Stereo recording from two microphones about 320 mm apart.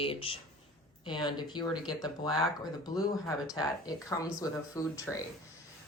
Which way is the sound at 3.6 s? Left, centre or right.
Centre.